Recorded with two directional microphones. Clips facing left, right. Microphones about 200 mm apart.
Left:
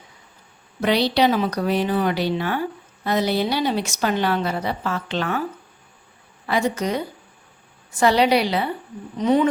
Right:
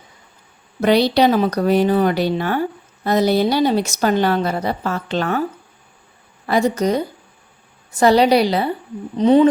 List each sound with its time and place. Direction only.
0.8 s speech: 45° right (ahead or behind)
6.4 s a woman's voice: 40° right (ahead or behind)